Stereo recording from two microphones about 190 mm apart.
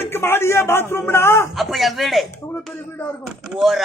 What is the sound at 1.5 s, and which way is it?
Speech, centre (ahead or behind).